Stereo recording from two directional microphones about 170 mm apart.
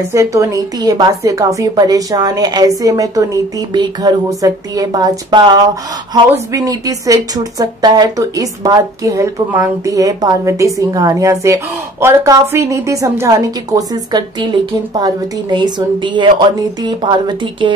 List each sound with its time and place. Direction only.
0.1 s speech: 20° right (ahead or behind)